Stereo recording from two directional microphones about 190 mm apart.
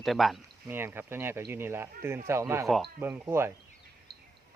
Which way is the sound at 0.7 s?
10° right (ahead or behind).